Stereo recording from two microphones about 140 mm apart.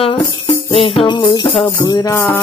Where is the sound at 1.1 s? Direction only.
30° left (ahead or behind).